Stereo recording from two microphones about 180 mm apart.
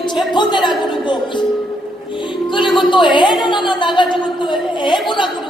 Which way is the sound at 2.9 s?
25° left (ahead or behind).